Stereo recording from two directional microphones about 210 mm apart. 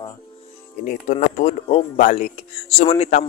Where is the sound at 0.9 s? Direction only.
35° left (ahead or behind).